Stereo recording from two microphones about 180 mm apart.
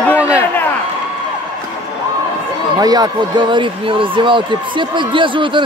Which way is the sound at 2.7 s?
20° right (ahead or behind).